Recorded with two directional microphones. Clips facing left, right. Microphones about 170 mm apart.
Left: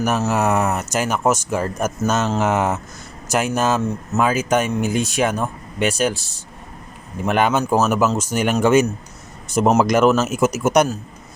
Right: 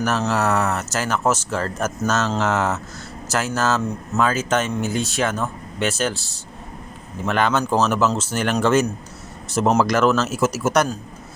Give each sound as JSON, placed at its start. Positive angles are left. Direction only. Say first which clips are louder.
{"t": 0.0, "sound": "speech", "louder": "left 2 dB", "side_deg": 10}